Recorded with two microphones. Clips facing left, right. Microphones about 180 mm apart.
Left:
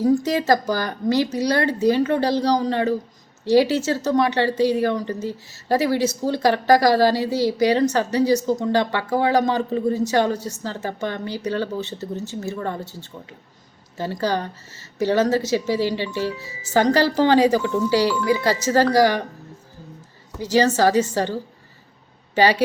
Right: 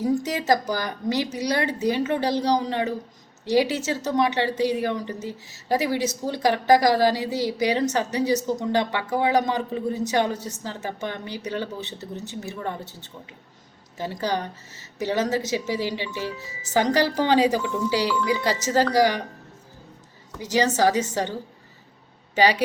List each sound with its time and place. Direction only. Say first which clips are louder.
0.0 s speech: left 5 dB; 20° right (ahead or behind)
14.0 s speech: left 3 dB; 15° right (ahead or behind)
20.4 s a woman's voice: left 3 dB; 20° right (ahead or behind)
22.4 s speech: left 2 dB; 15° right (ahead or behind)